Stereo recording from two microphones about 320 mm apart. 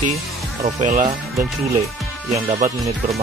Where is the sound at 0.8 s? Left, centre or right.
Right.